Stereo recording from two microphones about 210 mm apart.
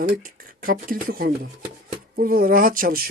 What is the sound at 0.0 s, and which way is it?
Speech, 40° right (ahead or behind).